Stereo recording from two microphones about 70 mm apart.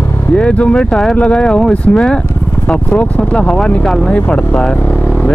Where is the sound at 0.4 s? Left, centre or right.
Centre.